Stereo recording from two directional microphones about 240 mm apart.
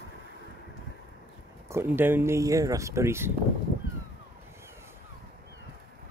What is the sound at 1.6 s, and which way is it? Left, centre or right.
Speech, centre.